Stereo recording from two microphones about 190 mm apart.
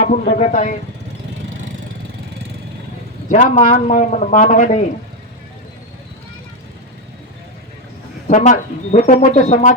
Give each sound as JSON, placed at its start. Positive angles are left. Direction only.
{"t": 0.0, "sound": "a man's voice", "side_deg": 40}
{"t": 3.2, "sound": "a man's voice", "side_deg": 40}
{"t": 8.3, "sound": "a man's voice", "side_deg": 40}